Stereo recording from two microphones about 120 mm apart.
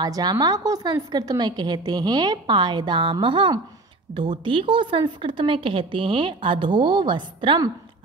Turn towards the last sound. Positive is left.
turn(degrees=-45)  # may be behind; listen again after turning